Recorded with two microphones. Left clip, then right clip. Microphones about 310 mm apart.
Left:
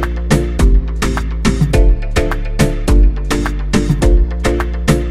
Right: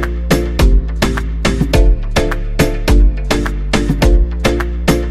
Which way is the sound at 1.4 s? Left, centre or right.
Centre.